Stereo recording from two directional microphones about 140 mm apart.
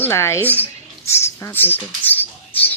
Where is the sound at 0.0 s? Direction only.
20° left (ahead or behind).